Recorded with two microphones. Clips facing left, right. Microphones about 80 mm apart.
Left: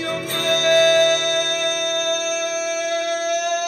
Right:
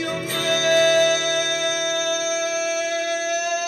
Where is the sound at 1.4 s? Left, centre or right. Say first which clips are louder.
Left 1 dB; left.